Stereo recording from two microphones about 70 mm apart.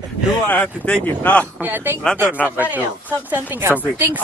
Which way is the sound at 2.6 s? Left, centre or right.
Right.